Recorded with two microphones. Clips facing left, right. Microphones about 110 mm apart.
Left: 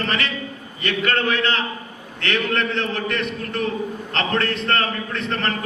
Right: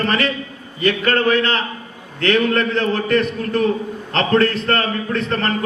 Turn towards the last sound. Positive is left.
turn(degrees=-40)  # may be behind; listen again after turning